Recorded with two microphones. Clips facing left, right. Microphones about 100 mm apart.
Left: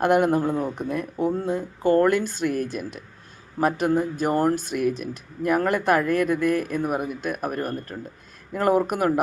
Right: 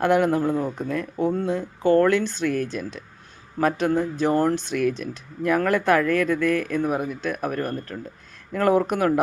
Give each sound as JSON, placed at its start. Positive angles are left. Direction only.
{"t": 0.0, "sound": "speech", "side_deg": 15}